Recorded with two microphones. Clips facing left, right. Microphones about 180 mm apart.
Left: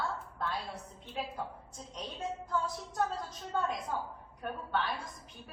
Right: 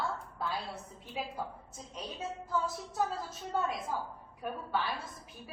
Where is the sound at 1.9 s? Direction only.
5° right (ahead or behind).